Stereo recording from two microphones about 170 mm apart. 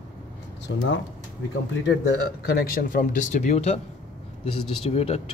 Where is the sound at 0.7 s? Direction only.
90° left.